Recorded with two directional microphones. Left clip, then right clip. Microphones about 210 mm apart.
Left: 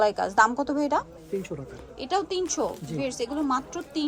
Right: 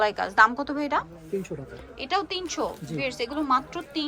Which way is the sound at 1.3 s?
Centre (ahead or behind).